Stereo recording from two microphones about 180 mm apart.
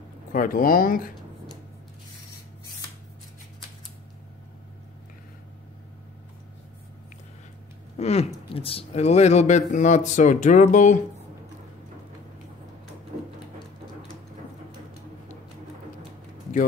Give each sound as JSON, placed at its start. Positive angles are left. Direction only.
{"t": 0.3, "sound": "speech", "side_deg": 50}
{"t": 8.0, "sound": "speech", "side_deg": 35}